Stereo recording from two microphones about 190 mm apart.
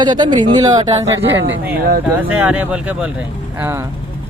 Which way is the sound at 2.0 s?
10° right (ahead or behind).